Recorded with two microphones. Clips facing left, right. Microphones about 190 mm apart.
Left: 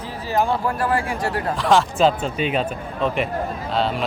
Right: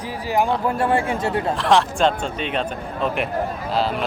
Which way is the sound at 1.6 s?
Centre (ahead or behind).